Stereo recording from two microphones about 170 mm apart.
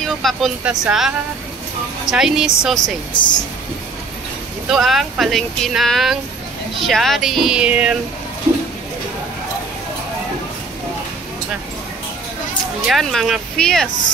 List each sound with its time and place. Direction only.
0.0 s speech: centre (ahead or behind)
3.1 s speech: 30° left (ahead or behind)
4.6 s speech: centre (ahead or behind)
12.8 s speech: centre (ahead or behind)